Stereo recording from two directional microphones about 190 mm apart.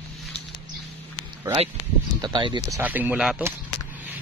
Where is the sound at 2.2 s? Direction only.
25° right (ahead or behind); by 3.5 s 5° right (ahead or behind).